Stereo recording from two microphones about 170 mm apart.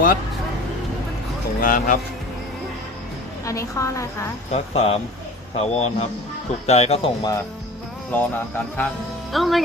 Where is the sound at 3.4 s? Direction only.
20° left (ahead or behind).